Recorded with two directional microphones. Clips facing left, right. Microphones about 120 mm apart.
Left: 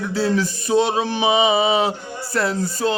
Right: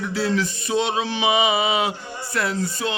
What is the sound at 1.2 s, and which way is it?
A man's voice, 30° left (ahead or behind).